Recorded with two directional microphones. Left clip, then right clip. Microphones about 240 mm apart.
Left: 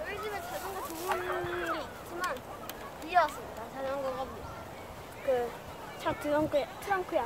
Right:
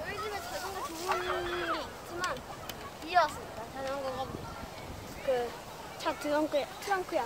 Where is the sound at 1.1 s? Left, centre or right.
Right.